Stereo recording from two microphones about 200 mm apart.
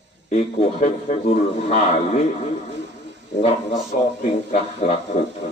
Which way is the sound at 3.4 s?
30° left (ahead or behind).